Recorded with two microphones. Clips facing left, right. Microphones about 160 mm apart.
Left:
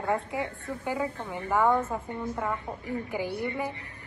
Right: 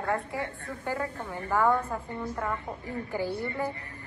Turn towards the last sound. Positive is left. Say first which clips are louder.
# even
turn(degrees=15)  # may be behind; listen again after turning